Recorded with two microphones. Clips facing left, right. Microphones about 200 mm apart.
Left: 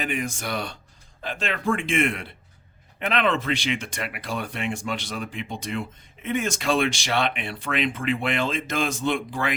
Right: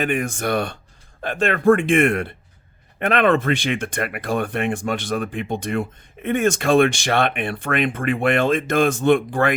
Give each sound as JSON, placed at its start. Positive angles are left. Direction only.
{"t": 0.0, "sound": "speech", "side_deg": -55}